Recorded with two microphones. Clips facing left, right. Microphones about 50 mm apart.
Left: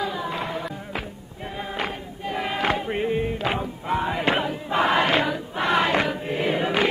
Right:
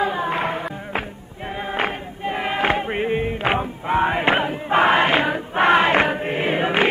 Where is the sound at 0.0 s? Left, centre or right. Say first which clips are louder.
Right 6 dB; right.